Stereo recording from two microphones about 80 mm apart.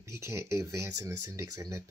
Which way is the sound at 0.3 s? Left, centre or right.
Right.